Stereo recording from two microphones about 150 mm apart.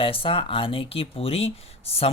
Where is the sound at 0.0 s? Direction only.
35° left (ahead or behind).